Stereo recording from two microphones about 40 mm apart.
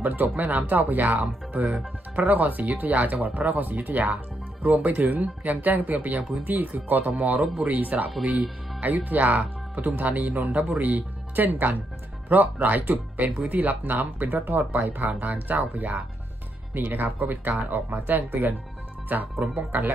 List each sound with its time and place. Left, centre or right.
0.0 s speech: right
16.7 s speech: right